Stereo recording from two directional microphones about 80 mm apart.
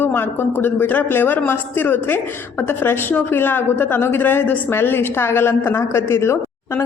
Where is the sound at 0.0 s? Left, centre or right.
Left.